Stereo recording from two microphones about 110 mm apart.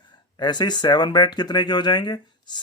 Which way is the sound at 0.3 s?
40° left (ahead or behind).